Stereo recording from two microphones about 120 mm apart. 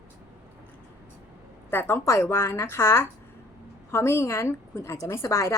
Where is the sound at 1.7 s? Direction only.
20° left (ahead or behind).